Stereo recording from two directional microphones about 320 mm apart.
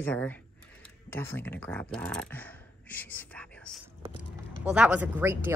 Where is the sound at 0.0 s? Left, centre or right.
Centre.